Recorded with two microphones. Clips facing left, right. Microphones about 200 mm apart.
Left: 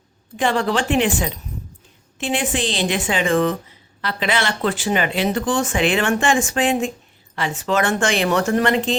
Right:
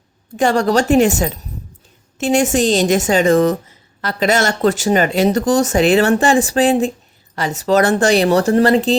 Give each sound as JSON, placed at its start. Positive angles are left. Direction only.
{"t": 0.3, "sound": "a woman's voice", "side_deg": -40}